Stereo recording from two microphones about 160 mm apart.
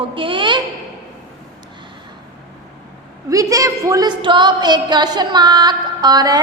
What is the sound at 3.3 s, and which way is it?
A woman's voice, 20° right (ahead or behind).